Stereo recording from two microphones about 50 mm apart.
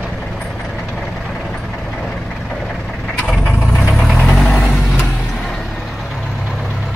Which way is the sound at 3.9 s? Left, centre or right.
Centre.